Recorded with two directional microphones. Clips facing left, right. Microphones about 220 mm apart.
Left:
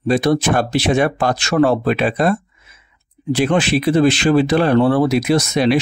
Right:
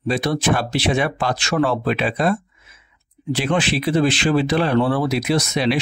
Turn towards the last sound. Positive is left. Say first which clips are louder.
# left 4 dB
turn(degrees=45)  # may be behind; listen again after turning